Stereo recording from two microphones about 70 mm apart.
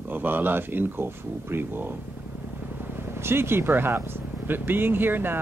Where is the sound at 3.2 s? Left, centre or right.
Right.